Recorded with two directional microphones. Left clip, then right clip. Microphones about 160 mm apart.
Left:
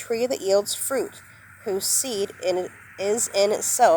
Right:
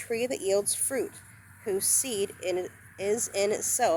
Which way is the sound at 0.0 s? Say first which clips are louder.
Left 5 dB; 30° left (ahead or behind).